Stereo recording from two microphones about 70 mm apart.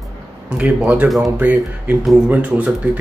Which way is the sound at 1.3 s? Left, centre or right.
Right.